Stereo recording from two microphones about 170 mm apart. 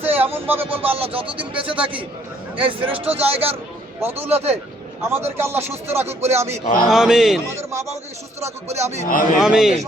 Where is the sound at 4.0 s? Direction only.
10° right (ahead or behind).